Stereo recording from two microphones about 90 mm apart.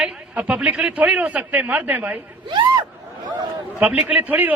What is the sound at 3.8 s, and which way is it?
Speech, 15° right (ahead or behind).